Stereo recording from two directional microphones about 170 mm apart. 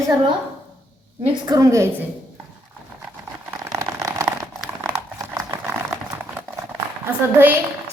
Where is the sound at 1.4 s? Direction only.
20° right (ahead or behind).